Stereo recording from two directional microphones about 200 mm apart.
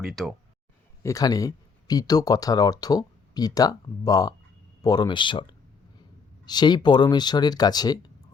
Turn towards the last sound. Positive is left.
turn(degrees=20)  # may be behind; listen again after turning